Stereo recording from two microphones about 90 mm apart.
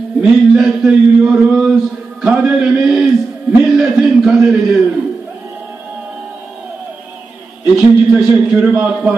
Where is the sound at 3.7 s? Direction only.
5° right (ahead or behind).